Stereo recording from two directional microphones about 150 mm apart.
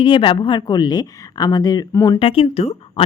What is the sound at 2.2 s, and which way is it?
Speech, 40° left (ahead or behind).